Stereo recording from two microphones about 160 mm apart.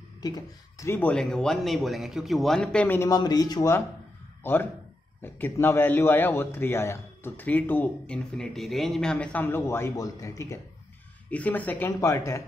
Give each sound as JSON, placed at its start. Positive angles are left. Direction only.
{"t": 0.2, "sound": "speech", "side_deg": 25}
{"t": 0.9, "sound": "a man's voice", "side_deg": 5}
{"t": 3.2, "sound": "a man's voice", "side_deg": 25}